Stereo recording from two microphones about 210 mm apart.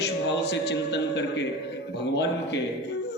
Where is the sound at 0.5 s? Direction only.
55° left (ahead or behind).